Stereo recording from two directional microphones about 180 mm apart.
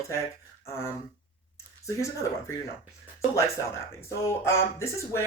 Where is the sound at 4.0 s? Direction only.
15° left (ahead or behind).